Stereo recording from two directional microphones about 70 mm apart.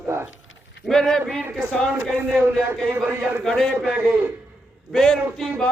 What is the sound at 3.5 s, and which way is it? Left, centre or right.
Speech, centre.